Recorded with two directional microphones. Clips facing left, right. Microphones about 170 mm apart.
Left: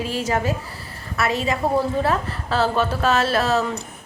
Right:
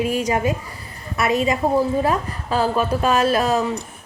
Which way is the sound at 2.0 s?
15° right (ahead or behind).